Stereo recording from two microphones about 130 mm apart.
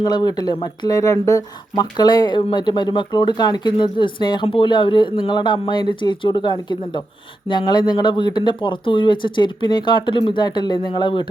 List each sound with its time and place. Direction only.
0.0 s speech: 30° left (ahead or behind)